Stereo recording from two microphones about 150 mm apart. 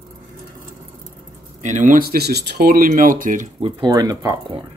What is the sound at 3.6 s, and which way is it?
Speech, 35° right (ahead or behind).